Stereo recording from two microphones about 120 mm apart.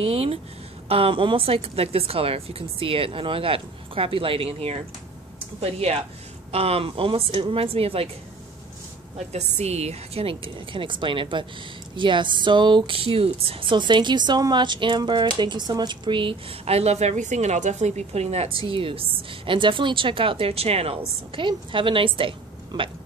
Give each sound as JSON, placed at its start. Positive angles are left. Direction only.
{"t": 0.0, "sound": "speech", "side_deg": -55}
{"t": 9.3, "sound": "speech", "side_deg": -60}